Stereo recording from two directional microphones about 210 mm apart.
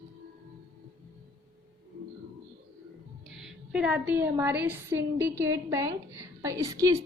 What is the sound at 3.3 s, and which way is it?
A woman's voice, 5° right (ahead or behind).